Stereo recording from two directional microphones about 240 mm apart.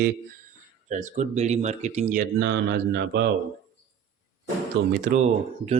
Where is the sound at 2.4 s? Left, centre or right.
Right.